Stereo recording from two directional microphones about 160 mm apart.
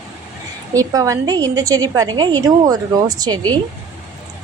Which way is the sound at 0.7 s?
20° right (ahead or behind).